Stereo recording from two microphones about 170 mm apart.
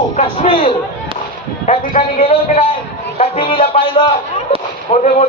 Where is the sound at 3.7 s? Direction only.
30° left (ahead or behind).